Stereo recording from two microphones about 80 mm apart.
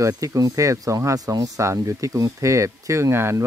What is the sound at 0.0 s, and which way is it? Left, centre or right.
Speech, right.